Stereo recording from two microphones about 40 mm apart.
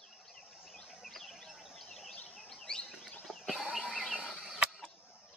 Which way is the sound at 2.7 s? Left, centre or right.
Left.